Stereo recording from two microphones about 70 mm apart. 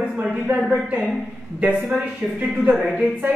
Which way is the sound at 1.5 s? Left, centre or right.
Centre.